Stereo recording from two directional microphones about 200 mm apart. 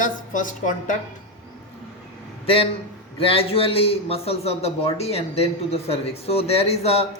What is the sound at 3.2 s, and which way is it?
A man's voice, 30° left (ahead or behind).